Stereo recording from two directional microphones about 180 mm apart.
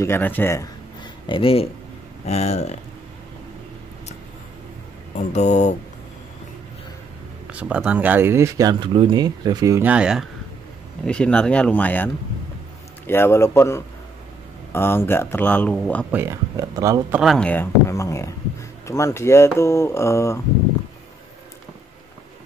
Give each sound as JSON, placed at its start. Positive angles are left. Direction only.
{"t": 0.0, "sound": "speech", "side_deg": 10}
{"t": 1.2, "sound": "speech", "side_deg": 30}
{"t": 5.3, "sound": "speech", "side_deg": 40}
{"t": 7.4, "sound": "speech", "side_deg": -5}
{"t": 11.1, "sound": "speech", "side_deg": 5}
{"t": 16.1, "sound": "speech", "side_deg": -15}
{"t": 17.2, "sound": "speech", "side_deg": 0}